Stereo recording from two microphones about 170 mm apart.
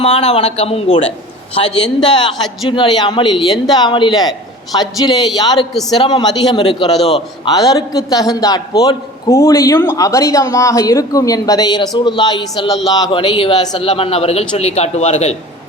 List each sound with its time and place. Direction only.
0.0 s speech: 40° left (ahead or behind)
2.1 s speech: 30° left (ahead or behind)
7.5 s speech: 20° left (ahead or behind); by 15.4 s 40° left (ahead or behind)